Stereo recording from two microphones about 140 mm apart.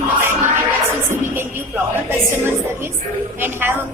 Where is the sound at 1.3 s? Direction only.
15° right (ahead or behind).